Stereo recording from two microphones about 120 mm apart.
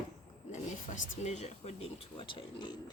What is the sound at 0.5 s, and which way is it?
Speech, 85° left.